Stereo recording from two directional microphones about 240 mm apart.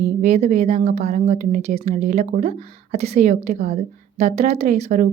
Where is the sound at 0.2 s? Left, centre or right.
Right.